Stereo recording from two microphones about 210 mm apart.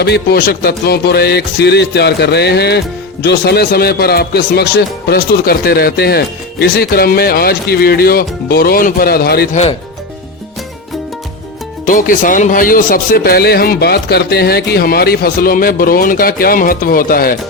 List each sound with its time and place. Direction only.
0.0 s speech: 50° left (ahead or behind)
11.9 s speech: 40° left (ahead or behind)